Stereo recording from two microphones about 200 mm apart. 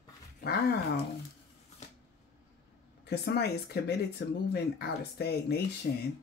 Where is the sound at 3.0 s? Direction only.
55° left (ahead or behind).